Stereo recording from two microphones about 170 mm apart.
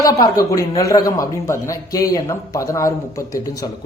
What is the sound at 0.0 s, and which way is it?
A man's voice, 20° left (ahead or behind).